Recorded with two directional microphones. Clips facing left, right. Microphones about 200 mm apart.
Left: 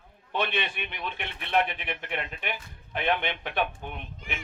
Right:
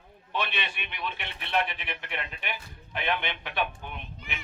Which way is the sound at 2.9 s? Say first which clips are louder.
Left 3 dB; 50° left (ahead or behind).